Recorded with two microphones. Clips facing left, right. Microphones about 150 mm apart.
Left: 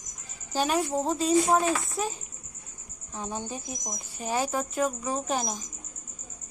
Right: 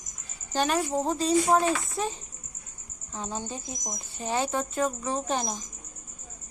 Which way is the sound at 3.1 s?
15° left (ahead or behind).